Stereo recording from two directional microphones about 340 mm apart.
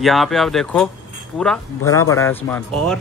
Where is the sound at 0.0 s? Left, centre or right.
Centre.